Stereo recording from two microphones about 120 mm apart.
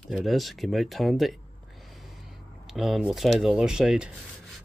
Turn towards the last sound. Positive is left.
turn(degrees=-5)  # may be behind; listen again after turning